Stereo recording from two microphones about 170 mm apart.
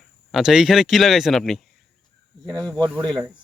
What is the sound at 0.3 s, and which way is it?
Speech, centre (ahead or behind).